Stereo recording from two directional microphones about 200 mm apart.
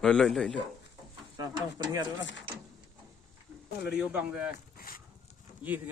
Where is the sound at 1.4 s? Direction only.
20° right (ahead or behind).